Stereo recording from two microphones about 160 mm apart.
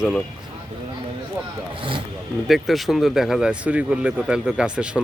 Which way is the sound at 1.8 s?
30° right (ahead or behind).